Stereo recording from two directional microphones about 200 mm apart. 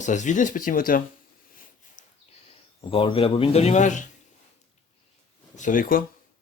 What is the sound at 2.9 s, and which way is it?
Speech, 25° left (ahead or behind).